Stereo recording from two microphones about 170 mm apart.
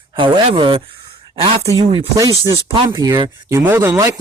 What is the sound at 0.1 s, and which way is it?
Speech, 25° right (ahead or behind).